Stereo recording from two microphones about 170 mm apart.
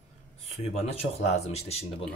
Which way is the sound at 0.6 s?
35° left (ahead or behind).